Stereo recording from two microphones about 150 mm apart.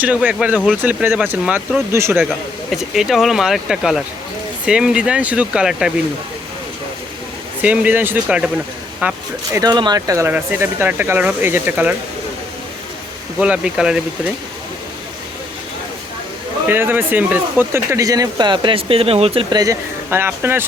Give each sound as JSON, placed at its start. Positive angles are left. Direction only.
{"t": 0.3, "sound": "speech", "side_deg": -10}
{"t": 2.6, "sound": "speech", "side_deg": 0}
{"t": 7.6, "sound": "speech", "side_deg": -10}
{"t": 9.5, "sound": "speech", "side_deg": -25}
{"t": 13.4, "sound": "speech", "side_deg": -5}
{"t": 16.6, "sound": "speech", "side_deg": -15}
{"t": 20.1, "sound": "speech", "side_deg": -15}